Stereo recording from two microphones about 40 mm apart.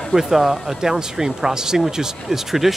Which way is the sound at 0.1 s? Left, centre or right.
Centre.